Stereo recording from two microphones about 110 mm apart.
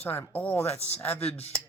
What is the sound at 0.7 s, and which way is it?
Speech, 75° left (ahead or behind).